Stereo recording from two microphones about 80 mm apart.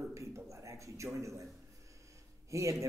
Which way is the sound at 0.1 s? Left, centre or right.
Right.